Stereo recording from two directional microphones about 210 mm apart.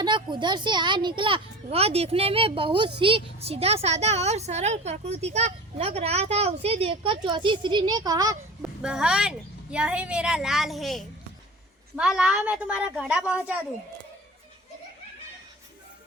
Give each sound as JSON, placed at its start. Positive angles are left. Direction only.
{"t": 0.0, "sound": "a woman's voice", "side_deg": -20}
{"t": 8.8, "sound": "a woman's voice", "side_deg": -5}